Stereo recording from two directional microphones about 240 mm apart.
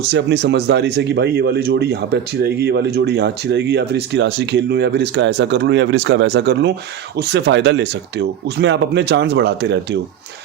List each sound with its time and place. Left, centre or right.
0.0 s speech: right